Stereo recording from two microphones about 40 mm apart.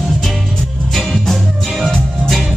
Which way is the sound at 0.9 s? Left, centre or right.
Centre.